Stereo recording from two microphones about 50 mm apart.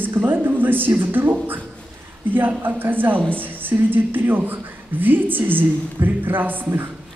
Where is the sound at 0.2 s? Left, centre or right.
Right.